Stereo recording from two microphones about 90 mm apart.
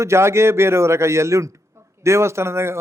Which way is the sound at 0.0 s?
30° right (ahead or behind).